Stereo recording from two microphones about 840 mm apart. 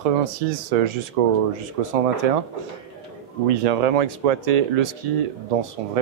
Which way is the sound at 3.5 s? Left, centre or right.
Right.